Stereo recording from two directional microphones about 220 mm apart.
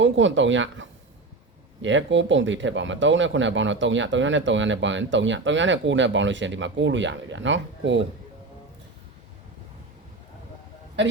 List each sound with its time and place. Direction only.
0.0 s speech: 60° right (ahead or behind)